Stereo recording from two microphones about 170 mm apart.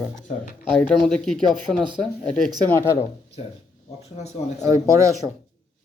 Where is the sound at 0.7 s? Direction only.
5° left (ahead or behind).